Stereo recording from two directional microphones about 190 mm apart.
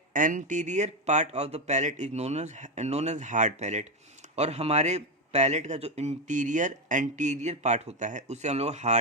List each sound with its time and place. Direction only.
0.1 s a man's voice: 45° right (ahead or behind)